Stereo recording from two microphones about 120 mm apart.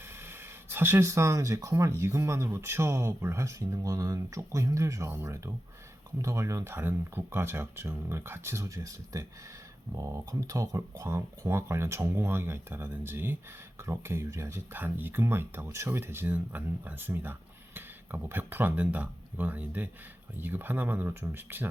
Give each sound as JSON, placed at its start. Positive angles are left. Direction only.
{"t": 0.2, "sound": "speech", "side_deg": -20}